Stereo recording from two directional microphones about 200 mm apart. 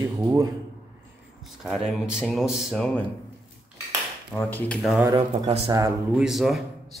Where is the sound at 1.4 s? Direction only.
Centre (ahead or behind).